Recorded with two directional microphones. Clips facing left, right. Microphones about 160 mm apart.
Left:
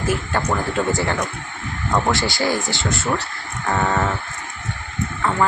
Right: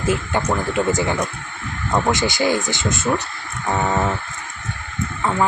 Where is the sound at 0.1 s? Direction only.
20° right (ahead or behind).